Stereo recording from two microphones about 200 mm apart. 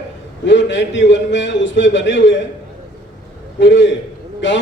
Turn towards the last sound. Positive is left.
turn(degrees=65)  # may be behind; listen again after turning